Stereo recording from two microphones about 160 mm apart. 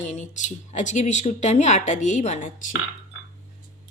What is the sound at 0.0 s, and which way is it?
Speech, 45° left (ahead or behind).